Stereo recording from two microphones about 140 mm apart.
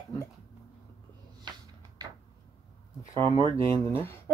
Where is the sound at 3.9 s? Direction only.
15° left (ahead or behind).